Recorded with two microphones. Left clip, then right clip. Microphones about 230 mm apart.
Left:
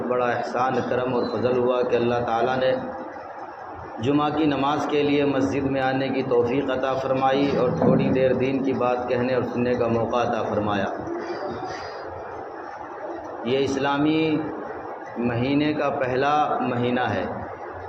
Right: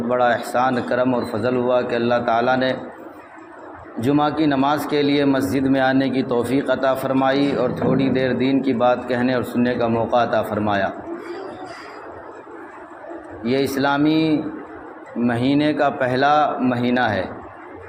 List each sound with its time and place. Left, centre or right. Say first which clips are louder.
0.1 s a man's voice: right 6 dB; right
4.0 s a man's voice: right 3 dB; right
13.5 s a man's voice: right 3 dB; right